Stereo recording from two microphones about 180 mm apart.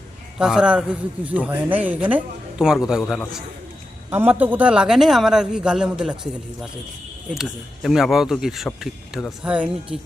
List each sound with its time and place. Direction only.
0.3 s a man's voice: 5° right (ahead or behind)
7.3 s a man's voice: centre (ahead or behind)